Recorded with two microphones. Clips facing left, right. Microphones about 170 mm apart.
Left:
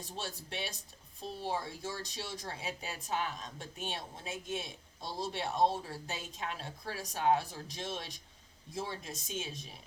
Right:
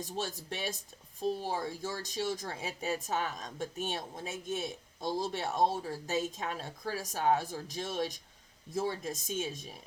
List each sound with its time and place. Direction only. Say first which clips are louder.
0.0 s a woman's voice: right 5 dB; 45° right (ahead or behind)